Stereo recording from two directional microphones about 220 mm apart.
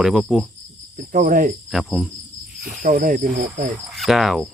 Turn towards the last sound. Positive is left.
turn(degrees=0)  # may be behind; listen again after turning